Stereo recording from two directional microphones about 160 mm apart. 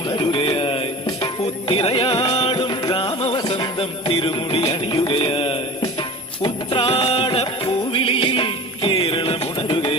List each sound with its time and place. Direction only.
0.1 s music: 30° left (ahead or behind)